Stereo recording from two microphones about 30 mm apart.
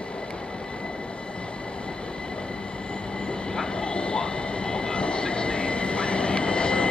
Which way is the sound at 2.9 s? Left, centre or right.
Left.